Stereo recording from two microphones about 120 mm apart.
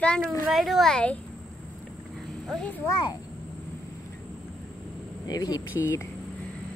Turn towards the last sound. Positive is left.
turn(degrees=25)  # may be behind; listen again after turning